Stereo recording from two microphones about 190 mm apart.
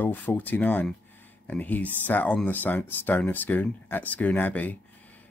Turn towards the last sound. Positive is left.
turn(degrees=10)  # may be behind; listen again after turning